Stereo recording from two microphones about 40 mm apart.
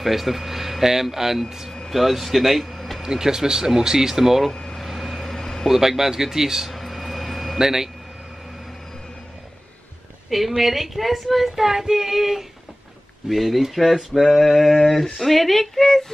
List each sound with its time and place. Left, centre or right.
0.0 s speech: centre
3.0 s speech: centre
4.5 s air conditioning: centre
4.8 s vehicle: centre
5.7 s speech: centre
6.7 s a sound: centre
7.5 s speech: centre
10.3 s speech: centre